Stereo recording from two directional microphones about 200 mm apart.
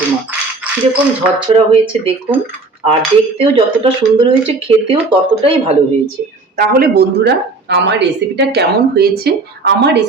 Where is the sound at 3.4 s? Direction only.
25° right (ahead or behind).